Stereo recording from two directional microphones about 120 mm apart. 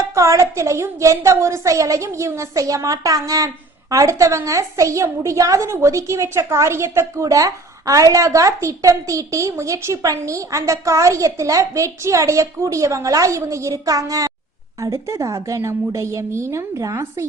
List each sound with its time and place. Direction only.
0.1 s a woman's voice: 25° right (ahead or behind)